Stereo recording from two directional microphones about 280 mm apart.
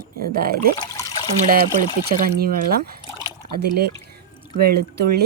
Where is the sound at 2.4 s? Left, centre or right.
Right.